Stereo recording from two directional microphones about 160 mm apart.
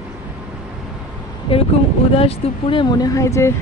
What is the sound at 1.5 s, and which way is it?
Speech, 30° left (ahead or behind).